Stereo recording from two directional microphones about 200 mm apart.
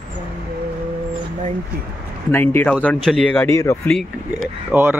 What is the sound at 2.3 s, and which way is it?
Speech, 10° left (ahead or behind).